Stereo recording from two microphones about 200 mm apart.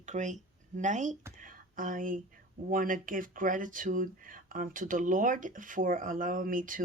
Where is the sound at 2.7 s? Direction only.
45° right (ahead or behind).